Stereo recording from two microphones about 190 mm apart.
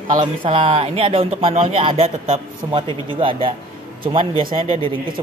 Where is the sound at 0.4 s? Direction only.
25° right (ahead or behind).